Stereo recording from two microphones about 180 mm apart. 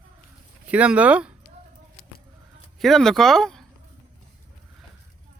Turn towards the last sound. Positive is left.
turn(degrees=5)  # may be behind; listen again after turning